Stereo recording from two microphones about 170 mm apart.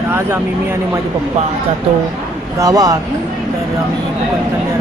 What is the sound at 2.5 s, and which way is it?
Speech, 20° right (ahead or behind).